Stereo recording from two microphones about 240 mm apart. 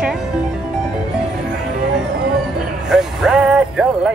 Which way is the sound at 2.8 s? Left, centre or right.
Centre.